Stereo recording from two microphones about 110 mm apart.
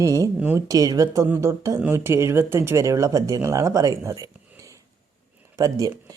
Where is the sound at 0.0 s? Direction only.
30° right (ahead or behind).